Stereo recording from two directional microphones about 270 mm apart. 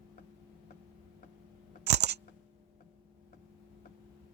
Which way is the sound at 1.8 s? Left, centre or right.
Right.